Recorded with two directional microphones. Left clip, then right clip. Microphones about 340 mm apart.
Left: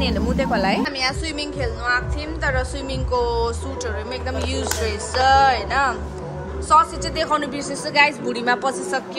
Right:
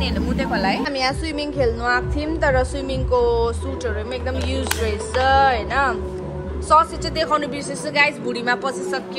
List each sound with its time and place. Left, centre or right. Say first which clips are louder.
0.0 s speech: left 2 dB; left
0.8 s a woman's voice: right 1 dB; centre